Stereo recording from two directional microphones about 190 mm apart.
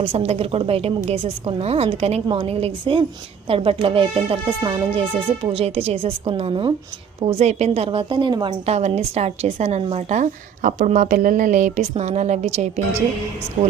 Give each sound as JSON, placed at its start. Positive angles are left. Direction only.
{"t": 0.0, "sound": "a woman's voice", "side_deg": -30}